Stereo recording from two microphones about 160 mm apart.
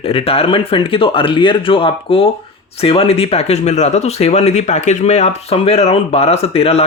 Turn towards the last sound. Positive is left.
turn(degrees=40)  # may be behind; listen again after turning